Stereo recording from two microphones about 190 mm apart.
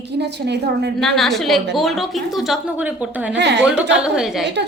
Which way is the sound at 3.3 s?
65° right (ahead or behind).